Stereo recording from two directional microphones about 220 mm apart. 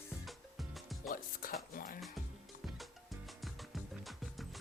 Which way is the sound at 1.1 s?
40° left (ahead or behind).